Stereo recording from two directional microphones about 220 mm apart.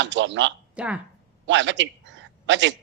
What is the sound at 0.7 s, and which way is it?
Speech, 5° right (ahead or behind).